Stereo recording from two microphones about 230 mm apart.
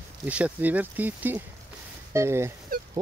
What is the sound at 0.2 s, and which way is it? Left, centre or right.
Speech, centre.